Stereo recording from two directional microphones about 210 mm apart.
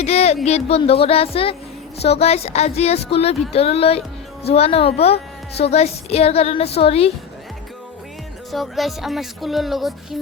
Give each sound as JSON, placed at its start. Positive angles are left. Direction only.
{"t": 0.0, "sound": "a woman's voice", "side_deg": 30}
{"t": 8.5, "sound": "music", "side_deg": 0}